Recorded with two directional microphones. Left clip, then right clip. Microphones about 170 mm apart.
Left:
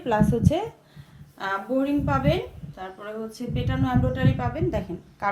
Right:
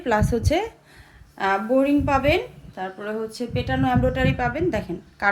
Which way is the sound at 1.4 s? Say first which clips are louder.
Right 6 dB; 50° right (ahead or behind).